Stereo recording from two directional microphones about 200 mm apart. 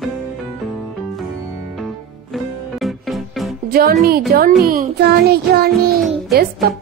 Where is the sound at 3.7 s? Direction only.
50° right (ahead or behind).